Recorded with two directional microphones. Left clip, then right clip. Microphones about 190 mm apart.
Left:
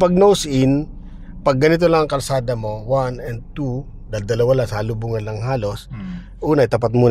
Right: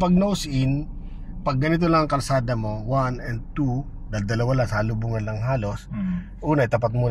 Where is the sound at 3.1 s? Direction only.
15° left (ahead or behind).